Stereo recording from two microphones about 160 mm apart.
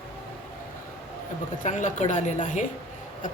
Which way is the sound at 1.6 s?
50° left (ahead or behind).